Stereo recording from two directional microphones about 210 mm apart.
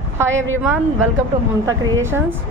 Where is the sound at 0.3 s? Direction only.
70° right (ahead or behind).